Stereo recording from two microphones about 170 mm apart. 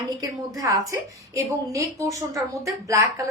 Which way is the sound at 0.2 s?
20° right (ahead or behind).